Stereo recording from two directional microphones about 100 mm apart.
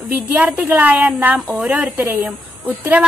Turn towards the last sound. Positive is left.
turn(degrees=-15)  # may be behind; listen again after turning